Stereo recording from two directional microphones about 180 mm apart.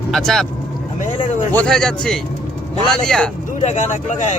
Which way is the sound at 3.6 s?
40° left (ahead or behind).